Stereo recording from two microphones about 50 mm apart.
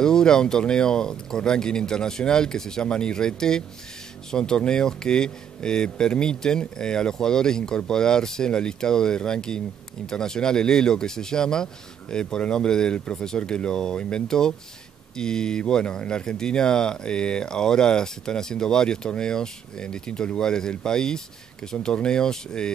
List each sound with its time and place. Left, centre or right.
0.0 s speech: centre